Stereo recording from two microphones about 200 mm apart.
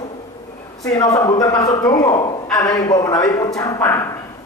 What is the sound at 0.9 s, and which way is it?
A woman's voice, 20° left (ahead or behind).